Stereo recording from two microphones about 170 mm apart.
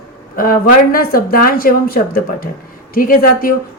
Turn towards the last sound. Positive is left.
turn(degrees=55)  # may be behind; listen again after turning